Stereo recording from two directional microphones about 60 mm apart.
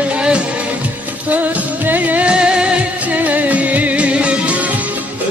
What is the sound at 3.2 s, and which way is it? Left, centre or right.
Music, right.